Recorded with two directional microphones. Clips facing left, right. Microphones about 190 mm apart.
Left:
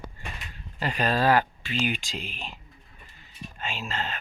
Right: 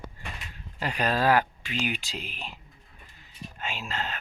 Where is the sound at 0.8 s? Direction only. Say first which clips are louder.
Left 1 dB; 10° right (ahead or behind).